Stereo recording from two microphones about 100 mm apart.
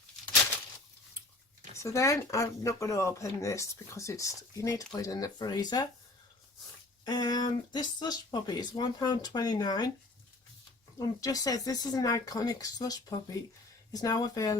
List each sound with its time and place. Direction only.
1.8 s speech: 30° left (ahead or behind)
7.0 s speech: 45° left (ahead or behind)
10.9 s speech: 40° left (ahead or behind)